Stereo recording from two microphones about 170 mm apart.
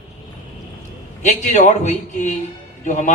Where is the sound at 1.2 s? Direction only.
45° left (ahead or behind).